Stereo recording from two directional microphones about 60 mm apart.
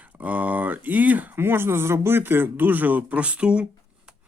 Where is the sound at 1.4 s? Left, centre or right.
Right.